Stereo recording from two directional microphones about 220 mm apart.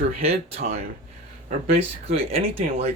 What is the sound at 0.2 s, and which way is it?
Speech, 30° right (ahead or behind).